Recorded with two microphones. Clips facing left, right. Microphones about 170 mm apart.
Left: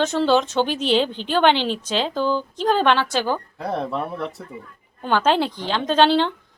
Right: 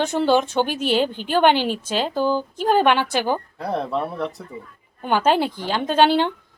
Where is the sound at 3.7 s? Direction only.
Centre (ahead or behind).